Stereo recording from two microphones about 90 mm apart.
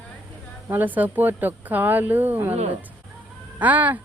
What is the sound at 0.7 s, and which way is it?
Speech, 20° right (ahead or behind).